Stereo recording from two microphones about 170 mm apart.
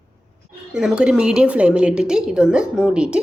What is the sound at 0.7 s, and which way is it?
Speech, 5° right (ahead or behind).